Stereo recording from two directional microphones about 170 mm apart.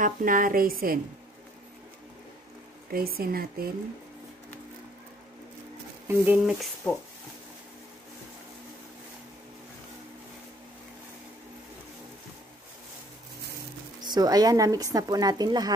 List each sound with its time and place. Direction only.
0.0 s speech: 55° right (ahead or behind)
2.9 s speech: 60° right (ahead or behind)
6.0 s speech: 10° right (ahead or behind)
6.6 s speech: 10° left (ahead or behind)
14.0 s speech: 25° right (ahead or behind)